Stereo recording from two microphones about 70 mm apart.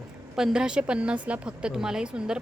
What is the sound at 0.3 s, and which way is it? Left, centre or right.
A woman's voice, centre.